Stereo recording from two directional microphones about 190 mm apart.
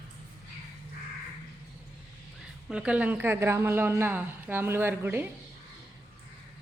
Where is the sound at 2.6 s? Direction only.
5° right (ahead or behind).